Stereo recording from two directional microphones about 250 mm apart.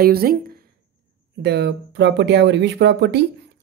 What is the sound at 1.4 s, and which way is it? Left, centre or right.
Speech, right.